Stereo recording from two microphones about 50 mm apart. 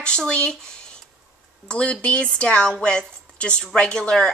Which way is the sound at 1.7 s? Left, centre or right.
Left.